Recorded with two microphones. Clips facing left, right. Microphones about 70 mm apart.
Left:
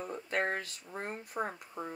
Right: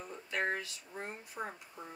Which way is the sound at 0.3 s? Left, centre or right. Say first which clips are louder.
Left 1 dB; left.